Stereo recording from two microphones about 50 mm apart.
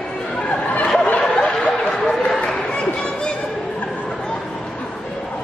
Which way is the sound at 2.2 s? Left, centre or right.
Centre.